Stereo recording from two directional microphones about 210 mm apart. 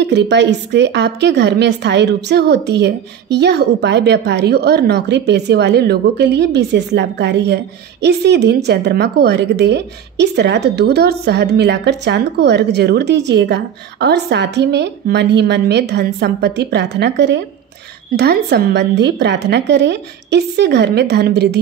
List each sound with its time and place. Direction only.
0.0 s a woman's voice: 55° right (ahead or behind)